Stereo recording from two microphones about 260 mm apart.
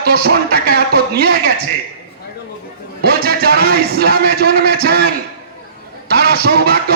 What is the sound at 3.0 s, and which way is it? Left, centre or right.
A man's voice, right.